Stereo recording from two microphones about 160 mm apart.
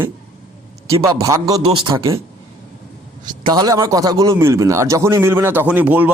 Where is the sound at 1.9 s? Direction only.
20° right (ahead or behind).